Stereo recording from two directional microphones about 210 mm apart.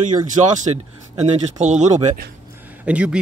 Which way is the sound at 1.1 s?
30° right (ahead or behind).